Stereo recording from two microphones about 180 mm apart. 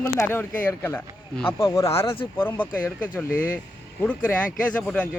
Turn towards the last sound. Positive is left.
turn(degrees=5)  # may be behind; listen again after turning